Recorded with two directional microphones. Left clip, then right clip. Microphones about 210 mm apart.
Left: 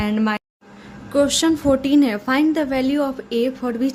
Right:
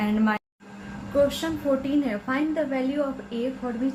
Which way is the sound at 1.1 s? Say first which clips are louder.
Left 6 dB; 50° left (ahead or behind).